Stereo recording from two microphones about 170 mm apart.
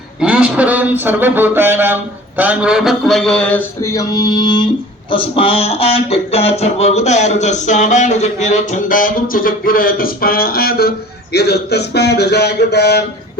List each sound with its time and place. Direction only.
0.2 s a man's voice: 5° right (ahead or behind)
2.4 s a sound: 5° right (ahead or behind); by 4.7 s 25° left (ahead or behind)
5.1 s speech: 30° left (ahead or behind); by 13.1 s 75° left (ahead or behind)